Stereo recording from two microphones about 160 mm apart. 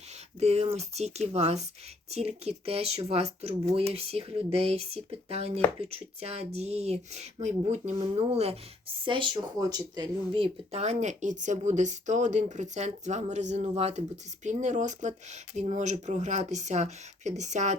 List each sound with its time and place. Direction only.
0.3 s speech: 40° right (ahead or behind)